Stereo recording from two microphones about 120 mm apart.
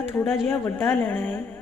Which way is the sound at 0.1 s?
20° left (ahead or behind).